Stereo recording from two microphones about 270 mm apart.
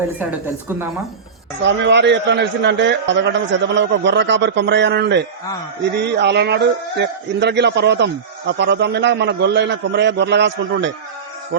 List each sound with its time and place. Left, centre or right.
1.6 s a man's voice: right